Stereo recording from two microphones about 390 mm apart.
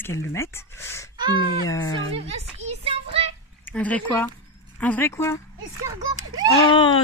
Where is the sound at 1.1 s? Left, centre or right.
Centre.